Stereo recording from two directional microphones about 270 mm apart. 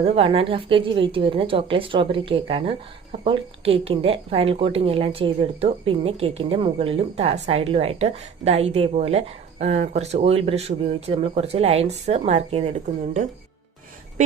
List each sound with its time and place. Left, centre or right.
0.0 s a woman's voice: right